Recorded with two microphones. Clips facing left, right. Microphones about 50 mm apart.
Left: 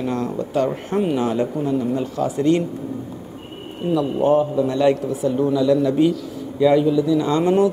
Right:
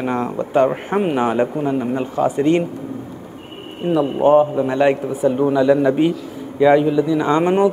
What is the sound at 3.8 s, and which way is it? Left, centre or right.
A man's voice, right.